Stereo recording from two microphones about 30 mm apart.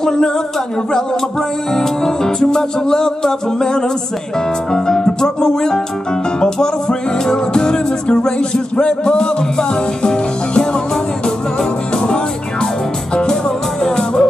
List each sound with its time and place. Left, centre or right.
0.0 s a sound: centre
1.7 s music: centre
11.9 s music: left